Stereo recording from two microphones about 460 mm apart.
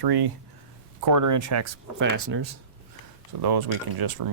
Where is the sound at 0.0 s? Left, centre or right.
Right.